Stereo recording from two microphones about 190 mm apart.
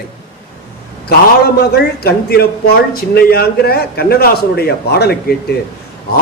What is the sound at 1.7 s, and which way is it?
A man's voice, 55° left (ahead or behind).